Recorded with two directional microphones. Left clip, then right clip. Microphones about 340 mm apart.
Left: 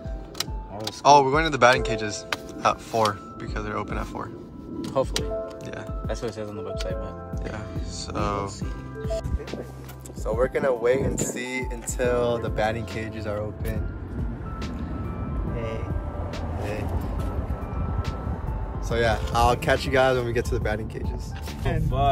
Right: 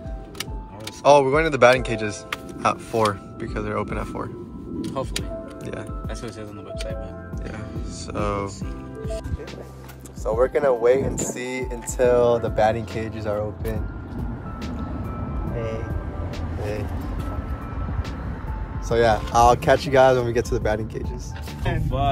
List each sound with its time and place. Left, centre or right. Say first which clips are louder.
1.0 s speech: right 1 dB; centre
4.8 s speech: left 4 dB; left
8.1 s speech: right 2 dB; centre
10.2 s speech: right 4 dB; centre
14.6 s music: right 2 dB; centre
18.9 s speech: right 5 dB; centre